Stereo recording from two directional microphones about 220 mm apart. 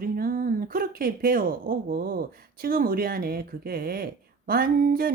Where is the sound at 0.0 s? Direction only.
40° right (ahead or behind).